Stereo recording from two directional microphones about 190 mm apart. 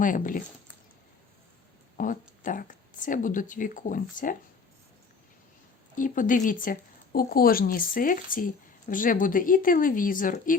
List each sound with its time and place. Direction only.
0.0 s speech: 45° left (ahead or behind)
2.0 s speech: 45° left (ahead or behind)
5.9 s speech: 45° left (ahead or behind)